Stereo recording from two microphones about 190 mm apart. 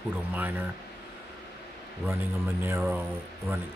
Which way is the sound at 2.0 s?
10° right (ahead or behind).